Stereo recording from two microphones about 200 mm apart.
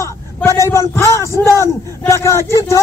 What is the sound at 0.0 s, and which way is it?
Speech, 15° left (ahead or behind).